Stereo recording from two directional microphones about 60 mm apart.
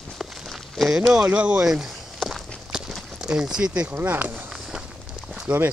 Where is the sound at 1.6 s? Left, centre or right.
Centre.